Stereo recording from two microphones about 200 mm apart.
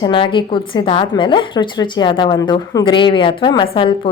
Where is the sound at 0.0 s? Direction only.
25° left (ahead or behind).